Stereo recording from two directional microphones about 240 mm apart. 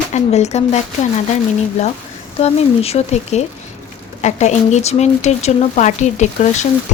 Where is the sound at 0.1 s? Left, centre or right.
Left.